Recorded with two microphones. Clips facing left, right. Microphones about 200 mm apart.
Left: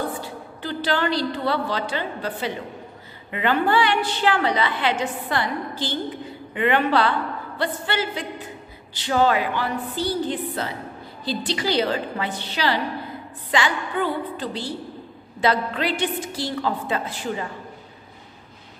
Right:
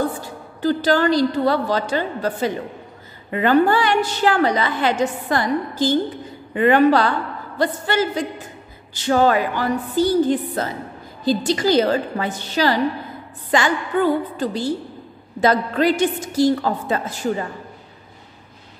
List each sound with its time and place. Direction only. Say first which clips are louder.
0.2 s a woman's voice: right 8 dB; 45° right (ahead or behind)